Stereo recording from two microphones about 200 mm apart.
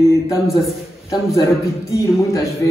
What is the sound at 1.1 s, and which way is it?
A man's voice, 15° left (ahead or behind).